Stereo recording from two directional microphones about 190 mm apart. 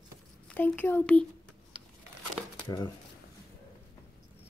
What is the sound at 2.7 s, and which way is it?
Speech, 20° left (ahead or behind).